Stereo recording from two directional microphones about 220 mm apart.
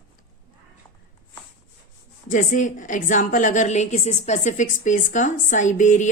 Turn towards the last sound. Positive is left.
turn(degrees=35)  # may be behind; listen again after turning